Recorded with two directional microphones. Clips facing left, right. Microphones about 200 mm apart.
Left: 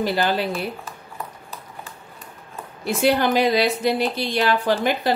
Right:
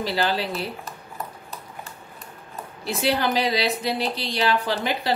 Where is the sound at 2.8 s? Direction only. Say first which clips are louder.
Left 4 dB; 50° left (ahead or behind).